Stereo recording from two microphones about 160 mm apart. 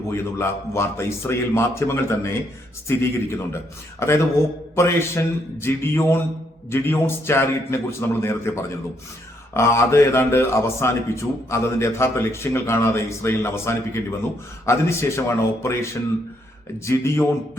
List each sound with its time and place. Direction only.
0.1 s a man's voice: 15° left (ahead or behind)